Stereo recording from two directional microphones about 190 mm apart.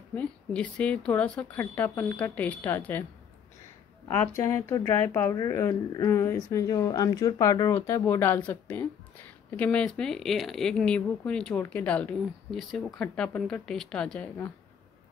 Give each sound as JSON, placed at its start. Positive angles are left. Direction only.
{"t": 0.1, "sound": "speech", "side_deg": 5}
{"t": 4.1, "sound": "speech", "side_deg": 10}